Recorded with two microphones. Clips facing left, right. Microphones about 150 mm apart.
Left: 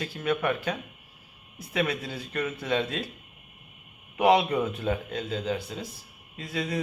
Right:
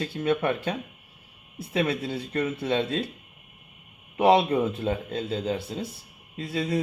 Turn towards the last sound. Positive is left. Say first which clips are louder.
# right 4 dB
turn(degrees=-30)  # may be behind; listen again after turning